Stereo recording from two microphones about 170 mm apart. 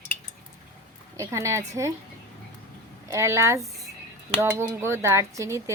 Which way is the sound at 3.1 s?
15° right (ahead or behind).